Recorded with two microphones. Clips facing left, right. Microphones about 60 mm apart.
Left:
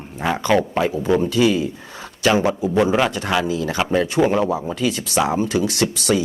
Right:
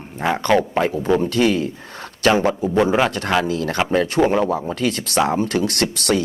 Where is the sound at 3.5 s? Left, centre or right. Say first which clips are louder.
Even; right.